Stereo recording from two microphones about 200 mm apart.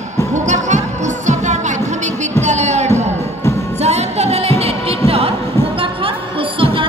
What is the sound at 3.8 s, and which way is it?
Music, 30° right (ahead or behind).